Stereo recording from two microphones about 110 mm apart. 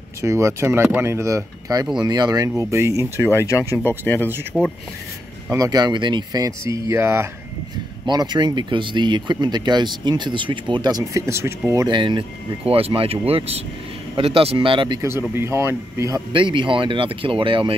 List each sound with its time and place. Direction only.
0.2 s speech: 25° right (ahead or behind)
3.3 s speech: 25° left (ahead or behind)
4.5 s speech: centre (ahead or behind)
5.5 s speech: 35° right (ahead or behind)
6.6 s speech: 25° right (ahead or behind)
8.1 s speech: 40° right (ahead or behind); by 11.9 s 25° right (ahead or behind)
11.9 s speech: 45° right (ahead or behind)
15.0 s speech: 25° right (ahead or behind)
16.3 s speech: 50° right (ahead or behind)